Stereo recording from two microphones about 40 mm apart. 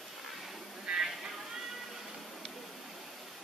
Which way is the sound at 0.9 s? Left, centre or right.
Right.